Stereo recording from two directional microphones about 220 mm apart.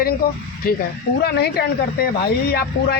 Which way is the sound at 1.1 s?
45° left (ahead or behind).